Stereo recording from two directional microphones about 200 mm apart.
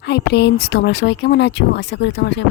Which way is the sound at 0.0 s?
55° left (ahead or behind).